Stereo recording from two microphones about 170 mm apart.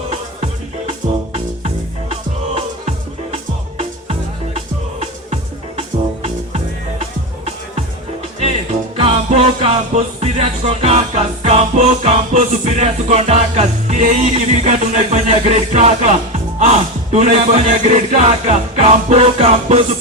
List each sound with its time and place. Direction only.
3.3 s music: 35° right (ahead or behind)
7.0 s music: 40° right (ahead or behind)
9.0 s music: 35° right (ahead or behind)